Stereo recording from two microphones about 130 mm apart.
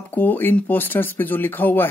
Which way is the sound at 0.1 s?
15° left (ahead or behind).